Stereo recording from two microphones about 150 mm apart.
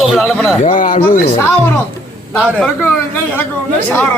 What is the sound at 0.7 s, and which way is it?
Speech, 65° left (ahead or behind).